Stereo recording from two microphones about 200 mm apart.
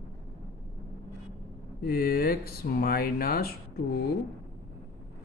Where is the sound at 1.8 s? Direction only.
50° left (ahead or behind).